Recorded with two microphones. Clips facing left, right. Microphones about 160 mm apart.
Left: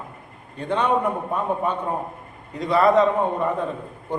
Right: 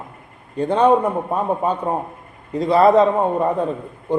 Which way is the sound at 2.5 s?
35° right (ahead or behind).